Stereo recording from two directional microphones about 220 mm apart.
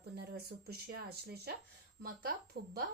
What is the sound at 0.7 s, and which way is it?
Speech, 45° right (ahead or behind).